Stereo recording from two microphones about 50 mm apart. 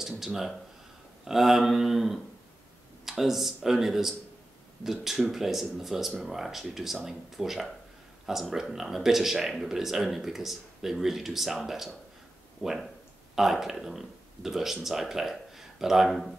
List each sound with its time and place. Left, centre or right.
0.0 s speech: centre